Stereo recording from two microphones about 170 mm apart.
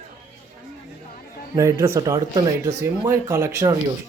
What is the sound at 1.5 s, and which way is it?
Speech, 15° right (ahead or behind).